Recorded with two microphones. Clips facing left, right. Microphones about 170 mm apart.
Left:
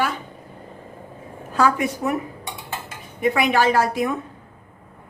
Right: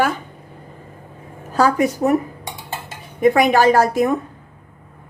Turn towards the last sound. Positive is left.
turn(degrees=-45)  # may be behind; listen again after turning